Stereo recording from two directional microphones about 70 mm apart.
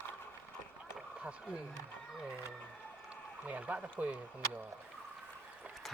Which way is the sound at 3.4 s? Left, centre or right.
Right.